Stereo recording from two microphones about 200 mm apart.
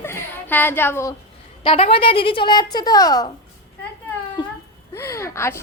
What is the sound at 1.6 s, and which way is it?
A woman's voice, 30° left (ahead or behind).